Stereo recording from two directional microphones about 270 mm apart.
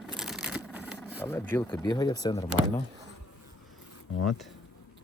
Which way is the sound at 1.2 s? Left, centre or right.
Centre.